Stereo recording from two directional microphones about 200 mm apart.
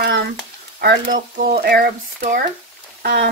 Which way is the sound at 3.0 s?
50° right (ahead or behind).